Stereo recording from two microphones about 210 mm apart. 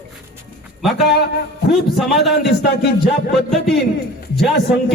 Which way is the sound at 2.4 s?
55° left (ahead or behind).